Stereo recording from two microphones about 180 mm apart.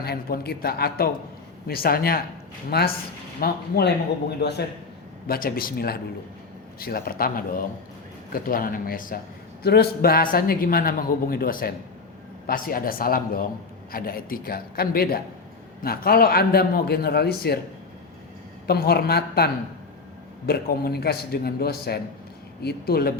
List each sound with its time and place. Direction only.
0.0 s a man's voice: 60° left (ahead or behind)
9.6 s a man's voice: 60° left (ahead or behind)
18.7 s a man's voice: 60° left (ahead or behind)
20.5 s a man's voice: 60° left (ahead or behind)